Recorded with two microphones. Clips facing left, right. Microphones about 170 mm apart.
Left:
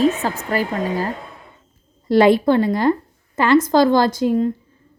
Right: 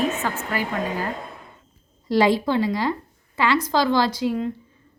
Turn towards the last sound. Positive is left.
turn(degrees=45)  # may be behind; listen again after turning